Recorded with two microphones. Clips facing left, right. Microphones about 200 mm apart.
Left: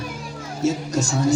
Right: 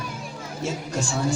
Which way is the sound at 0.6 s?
40° left (ahead or behind).